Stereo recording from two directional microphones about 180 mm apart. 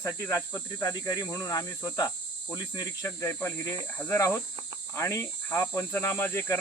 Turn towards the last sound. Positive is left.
turn(degrees=10)  # may be behind; listen again after turning